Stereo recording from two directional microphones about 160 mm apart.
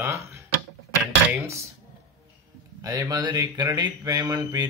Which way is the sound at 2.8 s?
20° right (ahead or behind).